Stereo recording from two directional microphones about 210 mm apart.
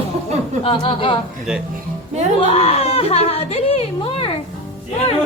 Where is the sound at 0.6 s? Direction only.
25° left (ahead or behind).